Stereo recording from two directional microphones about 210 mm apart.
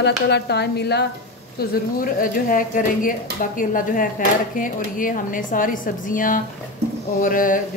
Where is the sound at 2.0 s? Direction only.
40° left (ahead or behind).